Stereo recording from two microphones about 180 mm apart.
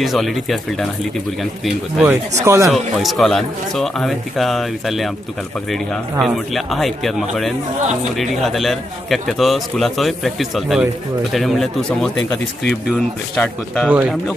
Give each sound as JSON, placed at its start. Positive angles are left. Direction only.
{"t": 0.0, "sound": "a man's voice", "side_deg": 0}
{"t": 2.4, "sound": "speech", "side_deg": -15}
{"t": 2.7, "sound": "a man's voice", "side_deg": 0}
{"t": 6.1, "sound": "a man's voice", "side_deg": 0}
{"t": 13.4, "sound": "a man's voice", "side_deg": 5}